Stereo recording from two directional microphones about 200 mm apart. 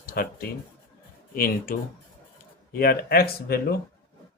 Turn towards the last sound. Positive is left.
turn(degrees=50)  # may be behind; listen again after turning